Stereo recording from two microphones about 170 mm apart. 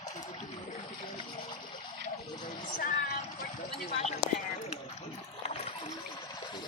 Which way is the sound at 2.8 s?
55° left (ahead or behind).